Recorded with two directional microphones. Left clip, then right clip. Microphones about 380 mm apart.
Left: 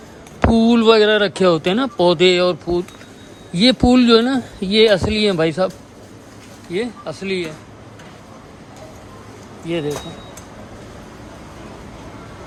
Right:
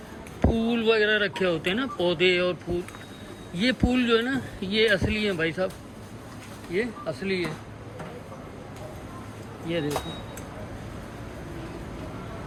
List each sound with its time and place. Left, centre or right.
0.5 s a sound: left
1.0 s speech: centre
6.7 s speech: centre
9.7 s speech: centre